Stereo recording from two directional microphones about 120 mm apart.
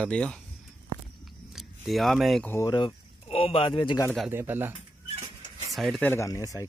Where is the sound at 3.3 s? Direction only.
55° left (ahead or behind).